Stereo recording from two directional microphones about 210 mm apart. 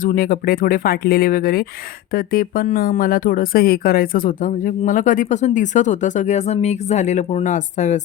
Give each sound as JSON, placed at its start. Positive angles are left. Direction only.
{"t": 0.0, "sound": "speech", "side_deg": 40}